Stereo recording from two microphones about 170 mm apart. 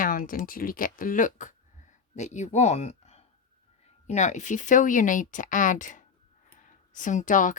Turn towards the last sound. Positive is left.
turn(degrees=50)  # may be behind; listen again after turning